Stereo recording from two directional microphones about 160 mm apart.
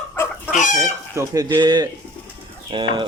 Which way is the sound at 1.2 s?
20° right (ahead or behind).